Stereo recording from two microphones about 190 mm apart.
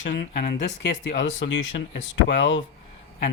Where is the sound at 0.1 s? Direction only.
55° left (ahead or behind).